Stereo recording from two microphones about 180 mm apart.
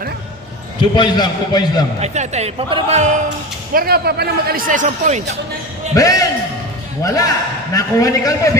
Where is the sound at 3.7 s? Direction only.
55° right (ahead or behind).